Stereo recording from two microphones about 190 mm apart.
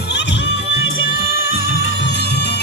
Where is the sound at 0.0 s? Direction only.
60° left (ahead or behind).